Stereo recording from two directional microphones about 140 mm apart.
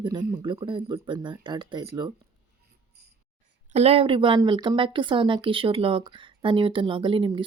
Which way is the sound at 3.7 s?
45° right (ahead or behind).